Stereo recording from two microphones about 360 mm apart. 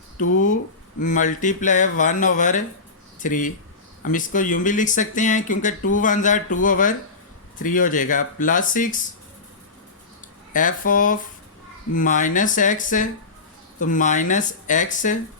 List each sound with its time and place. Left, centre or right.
0.2 s speech: left
10.5 s speech: left